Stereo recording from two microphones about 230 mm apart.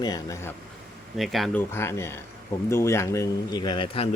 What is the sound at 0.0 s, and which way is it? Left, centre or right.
Speech, centre.